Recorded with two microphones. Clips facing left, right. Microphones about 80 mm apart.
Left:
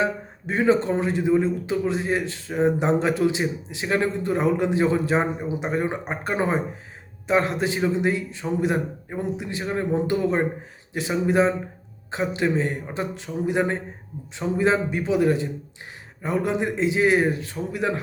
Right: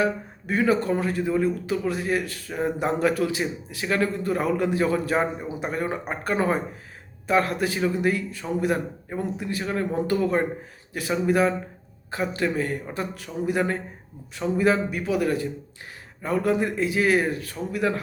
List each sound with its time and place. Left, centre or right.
0.0 s a man's voice: left